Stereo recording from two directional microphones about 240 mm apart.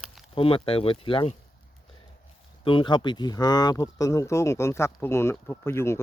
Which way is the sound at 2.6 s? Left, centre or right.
Left.